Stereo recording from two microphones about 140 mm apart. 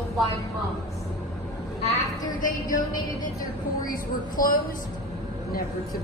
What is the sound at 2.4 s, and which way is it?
A woman's voice, 70° left (ahead or behind).